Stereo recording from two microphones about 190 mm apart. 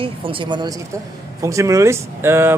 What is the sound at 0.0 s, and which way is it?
Speech, 25° right (ahead or behind).